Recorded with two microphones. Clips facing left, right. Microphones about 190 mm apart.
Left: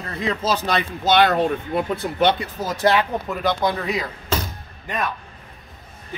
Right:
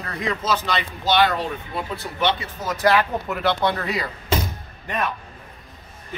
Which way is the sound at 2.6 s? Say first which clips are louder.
Even; 20° left (ahead or behind).